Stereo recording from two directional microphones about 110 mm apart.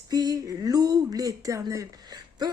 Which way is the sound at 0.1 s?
35° right (ahead or behind).